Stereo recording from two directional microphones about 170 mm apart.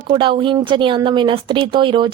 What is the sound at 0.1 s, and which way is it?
A woman's voice, 30° right (ahead or behind).